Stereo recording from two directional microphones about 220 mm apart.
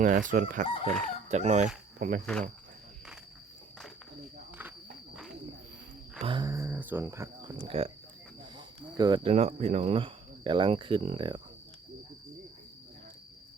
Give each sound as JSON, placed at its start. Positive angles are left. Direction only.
{"t": 0.0, "sound": "chicken", "side_deg": -35}
{"t": 0.9, "sound": "speech", "side_deg": 5}
{"t": 1.3, "sound": "chicken", "side_deg": -30}
{"t": 2.0, "sound": "cricket", "side_deg": -40}
{"t": 6.1, "sound": "cricket", "side_deg": -25}
{"t": 7.7, "sound": "speech", "side_deg": -25}